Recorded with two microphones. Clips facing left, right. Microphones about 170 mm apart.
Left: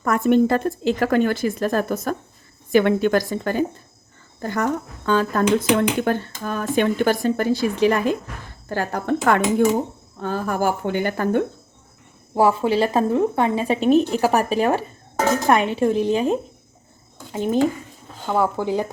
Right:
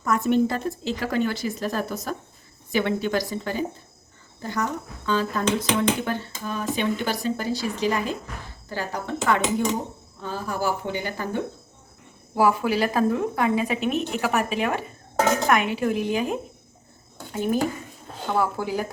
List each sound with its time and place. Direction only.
0.0 s a woman's voice: 55° left (ahead or behind)
12.3 s a woman's voice: 25° left (ahead or behind)
18.3 s a woman's voice: 20° left (ahead or behind)